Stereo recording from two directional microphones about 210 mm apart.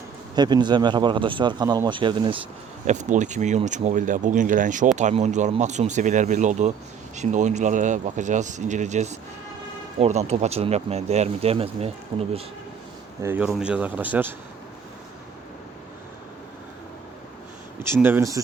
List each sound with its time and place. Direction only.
0.3 s speech: 20° right (ahead or behind)
2.8 s speech: 35° right (ahead or behind)
13.2 s speech: 5° right (ahead or behind)
18.0 s speech: 10° right (ahead or behind)